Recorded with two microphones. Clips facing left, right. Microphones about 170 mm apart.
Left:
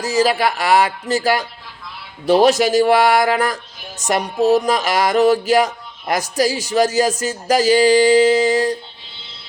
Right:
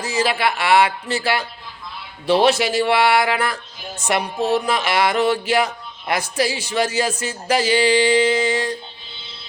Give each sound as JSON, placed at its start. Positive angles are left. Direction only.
{"t": 0.0, "sound": "music", "side_deg": 40}
{"t": 2.2, "sound": "speech", "side_deg": 40}
{"t": 4.0, "sound": "music", "side_deg": 40}